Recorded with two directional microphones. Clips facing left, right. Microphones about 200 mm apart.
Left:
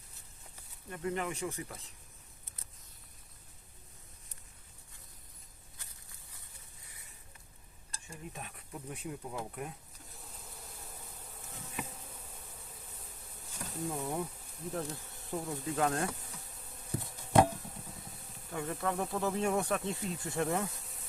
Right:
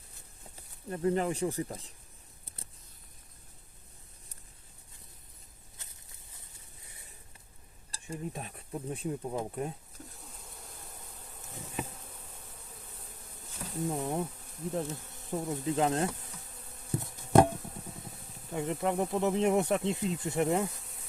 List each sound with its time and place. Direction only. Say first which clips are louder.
0.9 s speech: right 7 dB; 35° right (ahead or behind)
5.8 s a sound: right 1 dB; 20° right (ahead or behind)
7.9 s speech: right 9 dB; 35° right (ahead or behind)
10.2 s bee: right 1 dB; centre (ahead or behind)
11.8 s bee: right 4 dB; 30° right (ahead or behind)
13.6 s speech: right 4 dB; 20° right (ahead or behind)
18.5 s speech: right 4 dB; 20° right (ahead or behind)